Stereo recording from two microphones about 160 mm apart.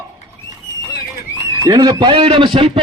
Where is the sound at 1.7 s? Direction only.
25° right (ahead or behind).